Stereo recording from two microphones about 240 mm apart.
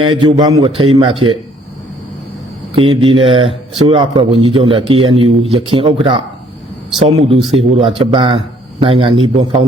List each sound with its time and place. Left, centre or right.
0.0 s speech: centre
2.7 s speech: right